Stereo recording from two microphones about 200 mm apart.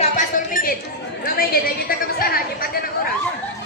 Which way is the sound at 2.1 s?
45° left (ahead or behind).